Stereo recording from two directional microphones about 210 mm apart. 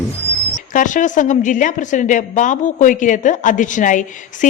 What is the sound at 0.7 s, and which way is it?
A woman's voice, 35° left (ahead or behind).